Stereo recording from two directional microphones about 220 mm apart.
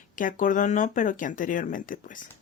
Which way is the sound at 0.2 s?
35° left (ahead or behind).